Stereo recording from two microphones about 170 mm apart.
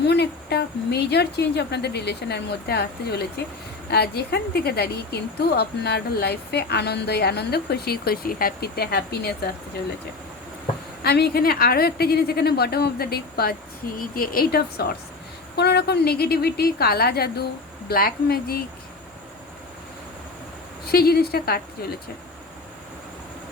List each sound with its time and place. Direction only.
0.0 s a woman's voice: 75° left (ahead or behind)
11.0 s a woman's voice: 70° left (ahead or behind)
20.8 s a woman's voice: 65° left (ahead or behind)